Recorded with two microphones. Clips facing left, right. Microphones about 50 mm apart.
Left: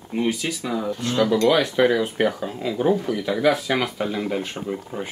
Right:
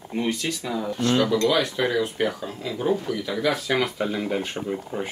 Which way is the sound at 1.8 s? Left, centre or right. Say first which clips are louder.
Left 4 dB; centre.